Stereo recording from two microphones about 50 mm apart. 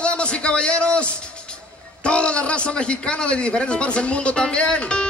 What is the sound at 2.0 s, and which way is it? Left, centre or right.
A man's voice, left.